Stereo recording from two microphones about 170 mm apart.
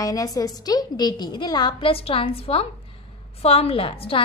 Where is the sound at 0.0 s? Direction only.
20° left (ahead or behind).